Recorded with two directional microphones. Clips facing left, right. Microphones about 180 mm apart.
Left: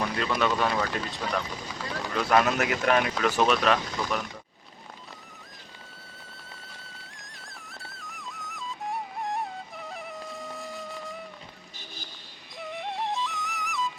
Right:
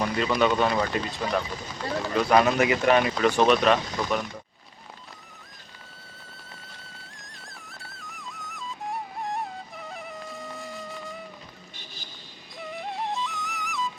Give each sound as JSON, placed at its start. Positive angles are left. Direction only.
{"t": 0.0, "sound": "speech", "side_deg": 0}
{"t": 6.5, "sound": "music", "side_deg": 0}
{"t": 12.5, "sound": "music", "side_deg": 0}